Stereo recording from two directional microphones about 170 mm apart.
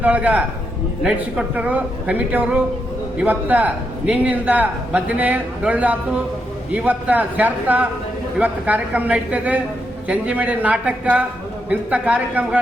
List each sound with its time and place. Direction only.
0.0 s a man's voice: 10° right (ahead or behind)